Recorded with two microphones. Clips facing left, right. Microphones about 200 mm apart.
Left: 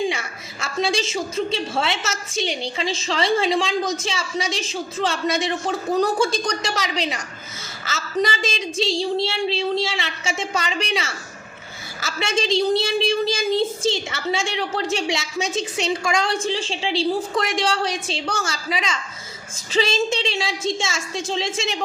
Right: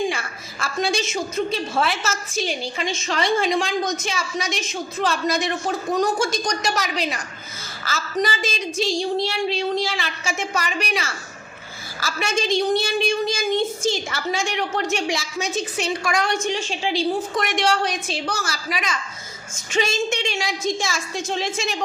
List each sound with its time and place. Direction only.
0.1 s a woman's voice: 20° left (ahead or behind)